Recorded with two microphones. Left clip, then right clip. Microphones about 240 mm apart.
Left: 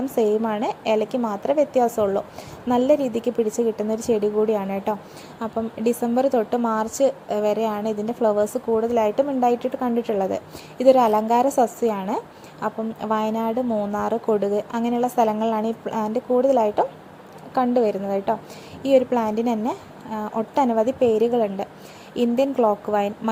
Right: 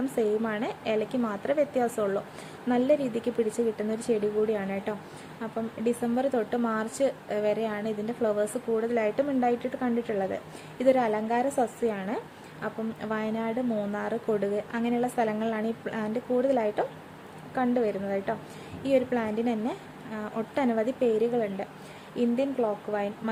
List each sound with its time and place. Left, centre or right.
0.2 s a woman's voice: centre